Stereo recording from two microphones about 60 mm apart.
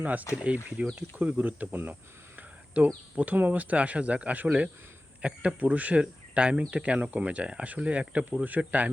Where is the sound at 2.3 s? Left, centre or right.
Right.